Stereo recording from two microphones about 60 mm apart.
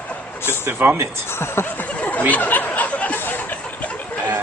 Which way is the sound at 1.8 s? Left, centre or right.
Left.